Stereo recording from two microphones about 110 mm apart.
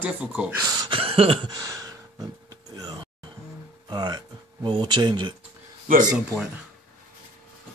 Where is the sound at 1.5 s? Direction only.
35° right (ahead or behind).